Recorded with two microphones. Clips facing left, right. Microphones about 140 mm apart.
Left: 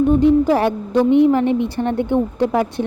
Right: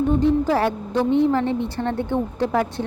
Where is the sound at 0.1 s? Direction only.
15° left (ahead or behind).